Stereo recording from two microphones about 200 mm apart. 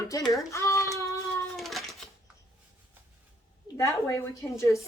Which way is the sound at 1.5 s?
Centre (ahead or behind).